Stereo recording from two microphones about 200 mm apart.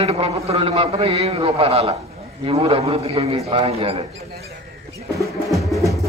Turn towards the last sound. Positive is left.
turn(degrees=0)  # may be behind; listen again after turning